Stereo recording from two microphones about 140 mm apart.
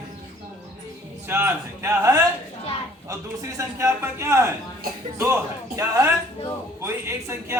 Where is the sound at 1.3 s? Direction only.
15° right (ahead or behind).